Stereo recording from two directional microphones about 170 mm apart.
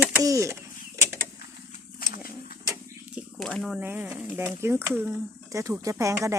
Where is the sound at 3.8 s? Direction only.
10° right (ahead or behind).